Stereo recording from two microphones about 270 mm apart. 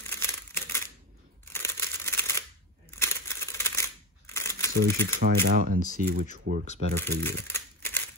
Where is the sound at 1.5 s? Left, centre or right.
Centre.